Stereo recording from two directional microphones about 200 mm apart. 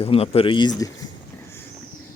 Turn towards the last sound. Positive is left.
turn(degrees=20)  # may be behind; listen again after turning